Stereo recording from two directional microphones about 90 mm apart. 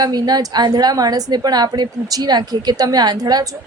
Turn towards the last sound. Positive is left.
turn(degrees=-45)  # may be behind; listen again after turning